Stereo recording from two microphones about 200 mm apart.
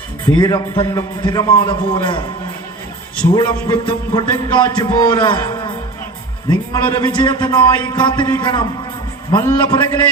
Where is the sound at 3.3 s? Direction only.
25° left (ahead or behind).